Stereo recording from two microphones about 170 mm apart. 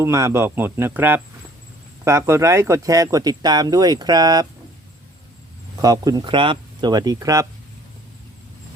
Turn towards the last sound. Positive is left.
turn(degrees=-20)  # may be behind; listen again after turning